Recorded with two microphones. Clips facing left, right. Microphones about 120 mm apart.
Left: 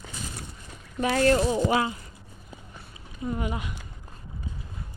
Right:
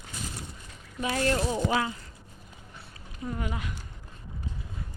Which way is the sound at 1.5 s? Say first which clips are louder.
Left 3 dB; 20° left (ahead or behind).